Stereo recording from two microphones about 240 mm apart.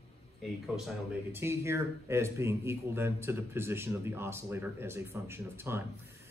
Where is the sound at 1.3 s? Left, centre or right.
Centre.